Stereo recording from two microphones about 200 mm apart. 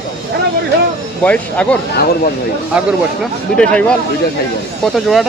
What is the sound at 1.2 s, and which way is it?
Speech, 5° left (ahead or behind).